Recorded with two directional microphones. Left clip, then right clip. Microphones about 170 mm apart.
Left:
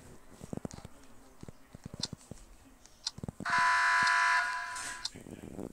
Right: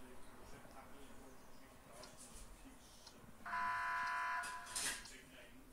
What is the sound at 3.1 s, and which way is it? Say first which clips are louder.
Fire alarm: left 14 dB; 65° left (ahead or behind).